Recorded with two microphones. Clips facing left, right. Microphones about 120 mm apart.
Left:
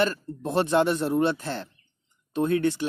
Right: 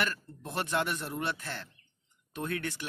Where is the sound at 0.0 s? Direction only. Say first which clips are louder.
Left 9 dB; 30° left (ahead or behind).